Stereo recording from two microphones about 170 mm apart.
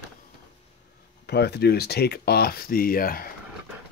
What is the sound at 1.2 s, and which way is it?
Speech, 75° left (ahead or behind).